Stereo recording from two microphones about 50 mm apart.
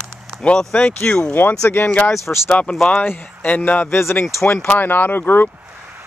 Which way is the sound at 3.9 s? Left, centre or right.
Left.